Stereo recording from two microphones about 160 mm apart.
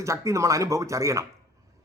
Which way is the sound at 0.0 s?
20° right (ahead or behind).